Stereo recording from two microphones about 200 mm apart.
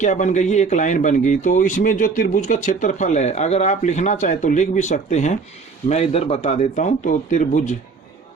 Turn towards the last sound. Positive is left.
turn(degrees=40)  # may be behind; listen again after turning